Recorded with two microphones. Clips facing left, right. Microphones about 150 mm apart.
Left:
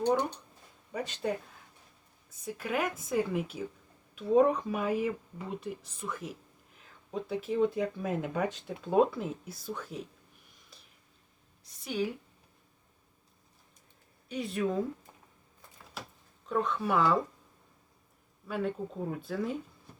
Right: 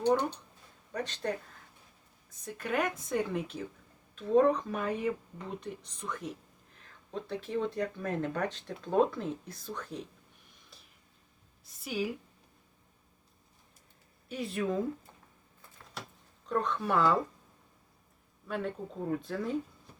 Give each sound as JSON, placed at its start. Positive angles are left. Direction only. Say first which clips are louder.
{"t": 0.9, "sound": "speech", "louder": "left 1 dB", "side_deg": 10}
{"t": 2.4, "sound": "speech", "louder": "even", "side_deg": 5}
{"t": 11.8, "sound": "speech", "louder": "left 1 dB", "side_deg": -5}
{"t": 14.3, "sound": "speech", "louder": "left 1 dB", "side_deg": 0}
{"t": 16.5, "sound": "speech", "louder": "left 1 dB", "side_deg": 0}
{"t": 18.4, "sound": "speech", "louder": "left 2 dB", "side_deg": 0}